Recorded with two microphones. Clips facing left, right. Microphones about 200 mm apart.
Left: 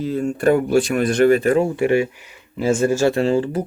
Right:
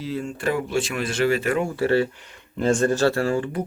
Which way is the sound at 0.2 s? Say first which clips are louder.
Left 10 dB; 55° left (ahead or behind).